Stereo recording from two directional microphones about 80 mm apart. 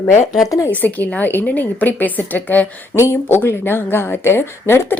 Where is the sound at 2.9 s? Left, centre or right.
Left.